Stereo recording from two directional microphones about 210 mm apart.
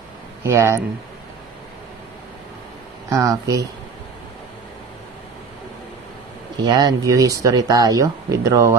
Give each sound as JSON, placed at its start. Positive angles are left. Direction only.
{"t": 0.4, "sound": "speech", "side_deg": -15}
{"t": 3.1, "sound": "speech", "side_deg": -15}
{"t": 6.6, "sound": "speech", "side_deg": -20}